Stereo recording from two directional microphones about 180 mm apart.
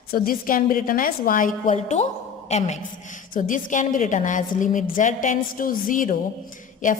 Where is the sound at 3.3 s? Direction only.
45° left (ahead or behind).